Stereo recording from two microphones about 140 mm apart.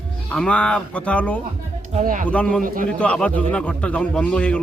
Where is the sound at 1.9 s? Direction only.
65° right (ahead or behind).